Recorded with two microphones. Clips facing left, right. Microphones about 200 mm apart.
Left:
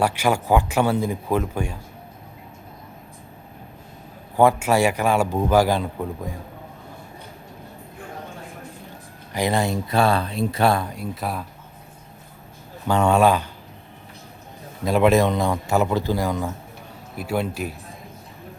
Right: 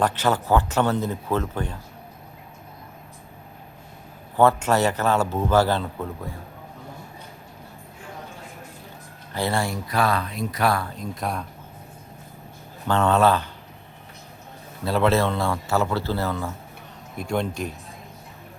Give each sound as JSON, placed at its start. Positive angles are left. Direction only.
{"t": 0.0, "sound": "a man's voice", "side_deg": 10}
{"t": 4.4, "sound": "a man's voice", "side_deg": 10}
{"t": 9.3, "sound": "speech", "side_deg": 15}
{"t": 10.9, "sound": "speech", "side_deg": 5}
{"t": 12.9, "sound": "a man's voice", "side_deg": 15}
{"t": 14.8, "sound": "a man's voice", "side_deg": 15}